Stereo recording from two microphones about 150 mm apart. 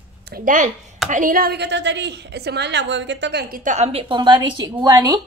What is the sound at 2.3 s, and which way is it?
A woman's voice, 90° right.